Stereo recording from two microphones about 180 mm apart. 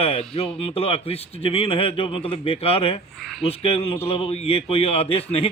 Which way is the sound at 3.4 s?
35° left (ahead or behind).